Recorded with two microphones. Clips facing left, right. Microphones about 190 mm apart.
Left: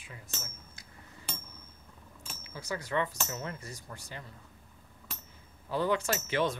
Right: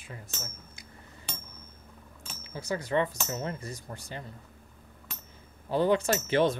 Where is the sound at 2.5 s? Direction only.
25° right (ahead or behind).